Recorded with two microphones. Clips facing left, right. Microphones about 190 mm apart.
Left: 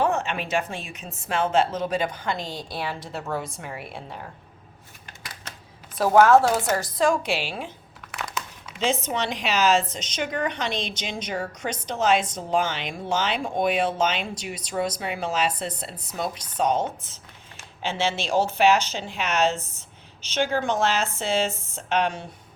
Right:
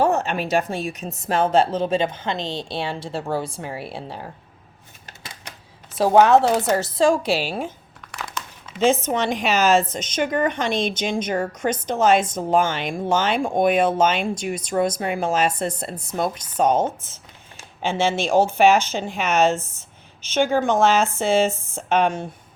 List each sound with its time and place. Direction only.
0.0 s a woman's voice: 40° right (ahead or behind)
6.0 s a woman's voice: 25° right (ahead or behind); by 7.7 s 40° right (ahead or behind)
8.1 s crumpling: centre (ahead or behind)
8.8 s a woman's voice: 50° right (ahead or behind)